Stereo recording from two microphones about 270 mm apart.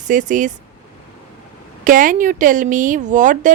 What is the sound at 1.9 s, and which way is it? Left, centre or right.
Speech, right.